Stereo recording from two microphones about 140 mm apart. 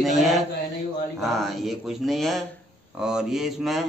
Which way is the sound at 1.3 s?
Centre (ahead or behind).